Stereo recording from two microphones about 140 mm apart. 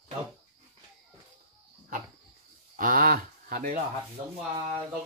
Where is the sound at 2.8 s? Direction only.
90° right.